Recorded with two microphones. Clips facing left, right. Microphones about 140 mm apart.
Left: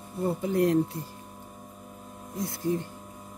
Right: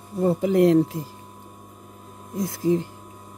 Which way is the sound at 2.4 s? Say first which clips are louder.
Right 7 dB; 90° right.